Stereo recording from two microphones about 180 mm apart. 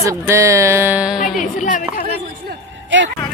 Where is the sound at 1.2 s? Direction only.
45° left (ahead or behind).